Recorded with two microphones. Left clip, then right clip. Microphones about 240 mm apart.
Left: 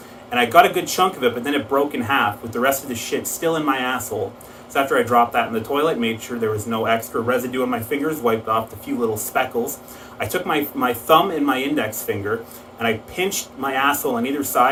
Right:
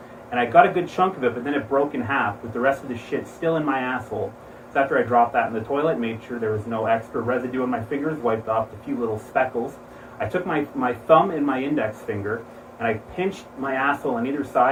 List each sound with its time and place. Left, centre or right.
0.3 s speech: centre